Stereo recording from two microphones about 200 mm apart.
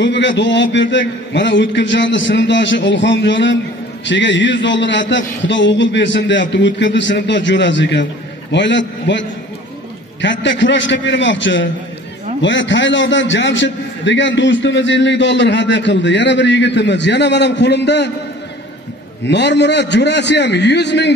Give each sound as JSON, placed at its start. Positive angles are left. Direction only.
{"t": 0.0, "sound": "a man's voice", "side_deg": 65}
{"t": 10.2, "sound": "a man's voice", "side_deg": 65}
{"t": 19.2, "sound": "a man's voice", "side_deg": 60}